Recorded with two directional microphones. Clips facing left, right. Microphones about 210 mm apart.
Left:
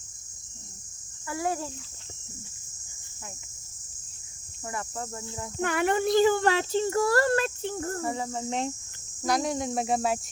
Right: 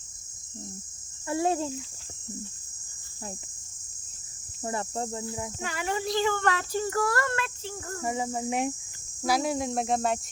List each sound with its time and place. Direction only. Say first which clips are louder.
1.3 s cricket: right 4 dB; 25° right (ahead or behind)
4.6 s cricket: right 4 dB; 30° right (ahead or behind)
5.5 s speech: left 9 dB; 60° left (ahead or behind)
6.4 s speech: left 3 dB; 25° left (ahead or behind)
8.0 s speech: right 1 dB; 15° right (ahead or behind); by 10.2 s 5° left (ahead or behind)